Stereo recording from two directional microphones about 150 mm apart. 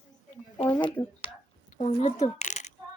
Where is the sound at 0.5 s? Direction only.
35° left (ahead or behind).